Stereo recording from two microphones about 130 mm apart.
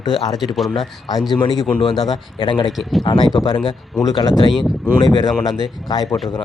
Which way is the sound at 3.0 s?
40° left (ahead or behind).